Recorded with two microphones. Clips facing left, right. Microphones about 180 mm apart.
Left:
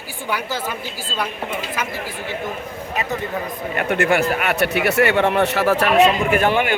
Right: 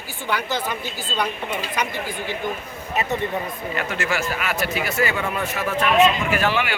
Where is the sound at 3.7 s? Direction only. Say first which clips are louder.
Left 8 dB; 60° left (ahead or behind).